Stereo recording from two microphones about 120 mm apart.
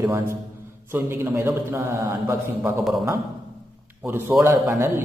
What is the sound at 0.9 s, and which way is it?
Speech, 20° right (ahead or behind).